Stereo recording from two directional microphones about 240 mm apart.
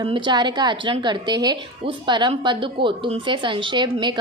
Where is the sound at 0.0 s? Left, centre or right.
Centre.